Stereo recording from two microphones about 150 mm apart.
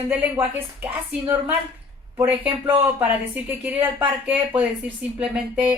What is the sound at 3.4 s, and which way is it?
A woman's voice, 10° right (ahead or behind).